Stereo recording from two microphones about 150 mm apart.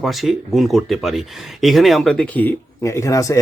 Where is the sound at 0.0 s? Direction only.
Centre (ahead or behind).